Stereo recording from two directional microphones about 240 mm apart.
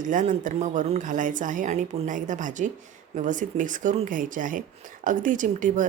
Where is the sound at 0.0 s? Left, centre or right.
Right.